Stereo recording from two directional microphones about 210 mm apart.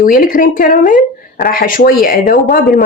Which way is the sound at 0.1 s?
40° left (ahead or behind).